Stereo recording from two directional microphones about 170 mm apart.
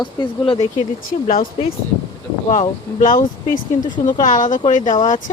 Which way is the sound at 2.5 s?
50° left (ahead or behind).